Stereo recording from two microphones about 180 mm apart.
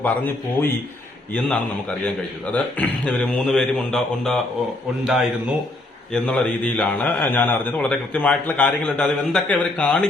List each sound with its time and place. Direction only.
0.0 s a man's voice: 10° left (ahead or behind)
2.5 s a man's voice: 10° left (ahead or behind)